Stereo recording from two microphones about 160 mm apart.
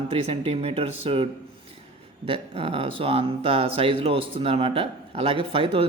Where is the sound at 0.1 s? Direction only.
40° right (ahead or behind).